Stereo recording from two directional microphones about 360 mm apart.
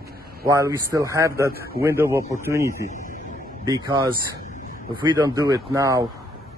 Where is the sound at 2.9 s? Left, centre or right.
Left.